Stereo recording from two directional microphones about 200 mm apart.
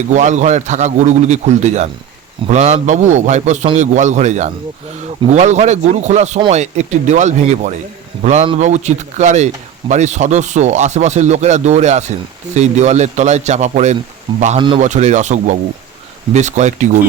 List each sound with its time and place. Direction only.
0.1 s speech: 35° right (ahead or behind)